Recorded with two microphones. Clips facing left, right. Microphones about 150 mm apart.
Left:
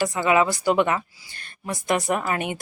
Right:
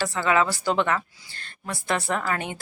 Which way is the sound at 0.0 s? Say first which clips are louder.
Left 3 dB; 15° left (ahead or behind).